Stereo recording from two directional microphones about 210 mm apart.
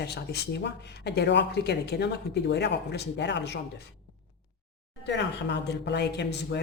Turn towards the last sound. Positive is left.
turn(degrees=55)  # may be behind; listen again after turning